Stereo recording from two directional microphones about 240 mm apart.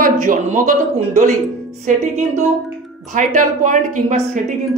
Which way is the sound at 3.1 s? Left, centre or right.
Right.